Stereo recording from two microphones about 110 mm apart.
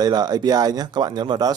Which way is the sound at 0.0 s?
35° right (ahead or behind).